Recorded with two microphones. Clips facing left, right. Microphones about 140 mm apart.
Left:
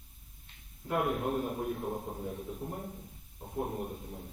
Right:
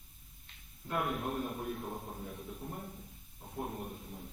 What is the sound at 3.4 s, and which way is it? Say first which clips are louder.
Speech: left 5 dB; 20° left (ahead or behind).